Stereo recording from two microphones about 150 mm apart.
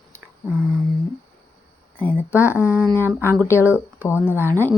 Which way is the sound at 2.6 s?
10° right (ahead or behind).